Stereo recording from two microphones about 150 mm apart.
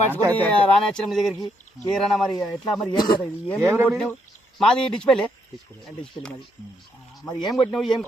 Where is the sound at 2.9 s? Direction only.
30° left (ahead or behind).